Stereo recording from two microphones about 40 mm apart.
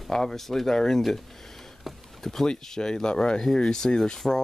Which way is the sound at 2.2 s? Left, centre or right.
Centre.